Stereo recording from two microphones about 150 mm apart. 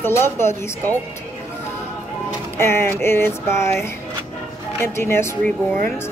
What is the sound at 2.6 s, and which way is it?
Speech, 15° left (ahead or behind).